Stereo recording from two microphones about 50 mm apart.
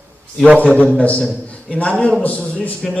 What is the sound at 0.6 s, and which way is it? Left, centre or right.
A man's voice, left.